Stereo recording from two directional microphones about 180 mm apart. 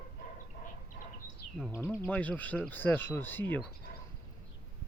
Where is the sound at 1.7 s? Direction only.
15° left (ahead or behind).